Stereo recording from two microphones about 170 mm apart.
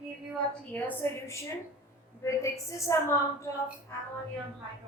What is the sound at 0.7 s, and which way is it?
A woman's voice, 10° left (ahead or behind).